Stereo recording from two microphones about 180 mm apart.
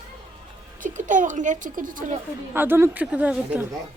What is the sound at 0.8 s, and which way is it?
A woman's voice, 45° right (ahead or behind).